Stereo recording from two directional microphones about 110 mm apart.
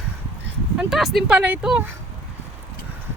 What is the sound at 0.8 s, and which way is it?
Speech, 5° right (ahead or behind).